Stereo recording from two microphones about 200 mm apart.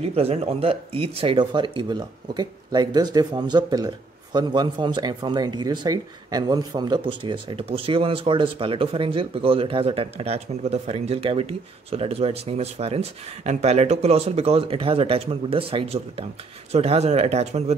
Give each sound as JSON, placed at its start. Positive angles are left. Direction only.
{"t": 0.0, "sound": "speech", "side_deg": -30}